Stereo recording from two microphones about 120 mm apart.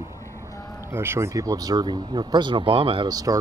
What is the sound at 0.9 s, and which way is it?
Speech, 20° right (ahead or behind).